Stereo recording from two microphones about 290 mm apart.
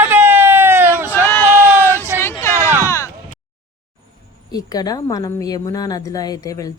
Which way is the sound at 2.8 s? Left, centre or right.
Centre.